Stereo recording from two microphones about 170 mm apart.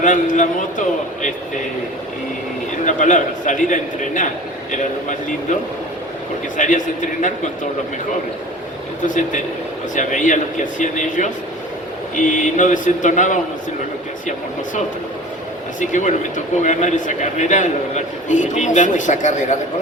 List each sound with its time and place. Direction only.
0.0 s a man's voice: 50° left (ahead or behind)
2.8 s a man's voice: 45° left (ahead or behind)
6.6 s a man's voice: 50° left (ahead or behind)
9.0 s a man's voice: 50° left (ahead or behind)
15.8 s a man's voice: 45° left (ahead or behind)